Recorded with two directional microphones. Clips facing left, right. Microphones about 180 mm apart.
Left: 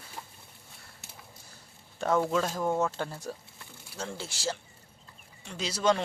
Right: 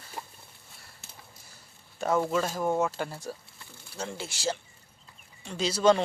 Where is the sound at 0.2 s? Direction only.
55° right (ahead or behind).